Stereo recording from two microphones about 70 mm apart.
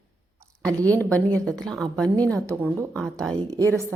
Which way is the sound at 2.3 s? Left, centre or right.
Right.